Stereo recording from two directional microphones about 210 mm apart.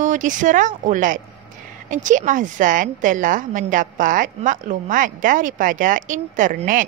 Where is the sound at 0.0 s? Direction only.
35° right (ahead or behind).